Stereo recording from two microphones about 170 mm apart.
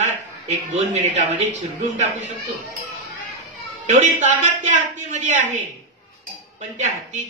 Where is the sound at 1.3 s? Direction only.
90° right.